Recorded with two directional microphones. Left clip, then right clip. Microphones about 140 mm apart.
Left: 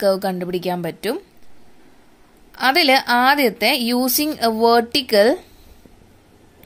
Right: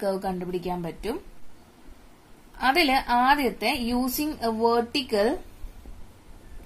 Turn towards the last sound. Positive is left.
turn(degrees=60)  # may be behind; listen again after turning